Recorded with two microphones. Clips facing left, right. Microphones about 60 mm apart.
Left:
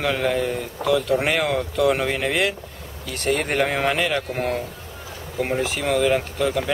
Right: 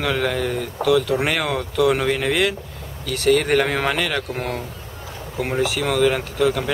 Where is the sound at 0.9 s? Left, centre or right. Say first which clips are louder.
Right 1 dB; centre.